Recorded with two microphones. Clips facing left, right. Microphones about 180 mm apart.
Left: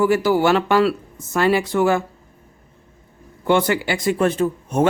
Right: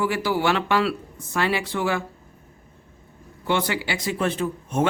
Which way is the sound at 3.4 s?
50° left (ahead or behind).